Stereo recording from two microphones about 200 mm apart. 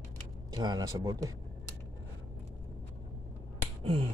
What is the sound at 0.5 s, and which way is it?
Speech, 20° right (ahead or behind).